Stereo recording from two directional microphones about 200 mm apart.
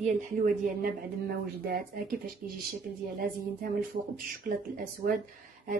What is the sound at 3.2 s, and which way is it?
Speech, 45° right (ahead or behind).